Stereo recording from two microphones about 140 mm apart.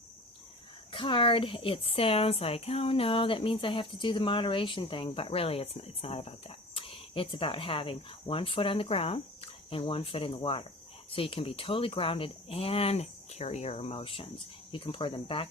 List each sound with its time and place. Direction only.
0.9 s speech: 35° left (ahead or behind)